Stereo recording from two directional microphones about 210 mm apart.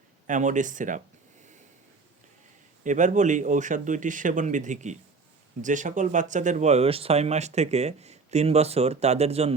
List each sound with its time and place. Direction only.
0.3 s speech: 35° right (ahead or behind)
2.8 s speech: 35° right (ahead or behind)